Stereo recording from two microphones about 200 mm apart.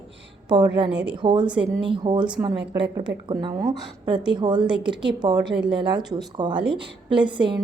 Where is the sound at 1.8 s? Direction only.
25° right (ahead or behind).